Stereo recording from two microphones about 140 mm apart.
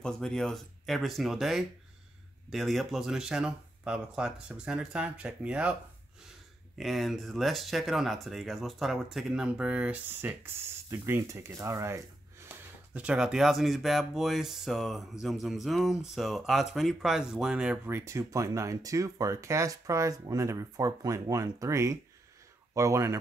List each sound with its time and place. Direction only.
0.0 s speech: 5° left (ahead or behind)
6.8 s speech: centre (ahead or behind); by 23.1 s 20° right (ahead or behind)